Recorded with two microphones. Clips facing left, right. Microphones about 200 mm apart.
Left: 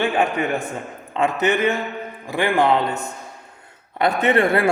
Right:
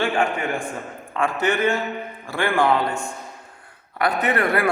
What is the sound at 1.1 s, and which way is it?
A man's voice, 20° left (ahead or behind).